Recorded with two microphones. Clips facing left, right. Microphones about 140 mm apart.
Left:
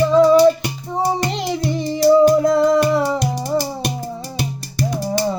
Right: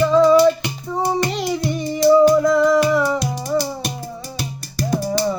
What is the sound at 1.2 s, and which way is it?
Child singing, 25° left (ahead or behind).